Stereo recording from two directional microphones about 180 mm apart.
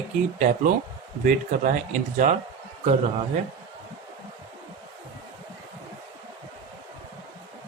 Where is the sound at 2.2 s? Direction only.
45° right (ahead or behind).